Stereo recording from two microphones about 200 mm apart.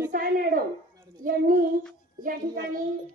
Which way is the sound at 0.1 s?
45° right (ahead or behind).